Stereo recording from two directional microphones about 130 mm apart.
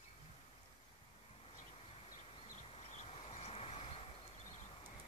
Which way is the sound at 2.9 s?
60° left (ahead or behind).